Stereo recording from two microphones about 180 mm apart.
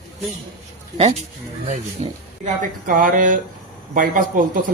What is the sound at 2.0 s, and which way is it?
Speech, 45° right (ahead or behind).